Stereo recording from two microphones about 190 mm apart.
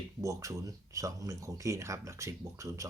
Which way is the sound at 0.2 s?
15° right (ahead or behind).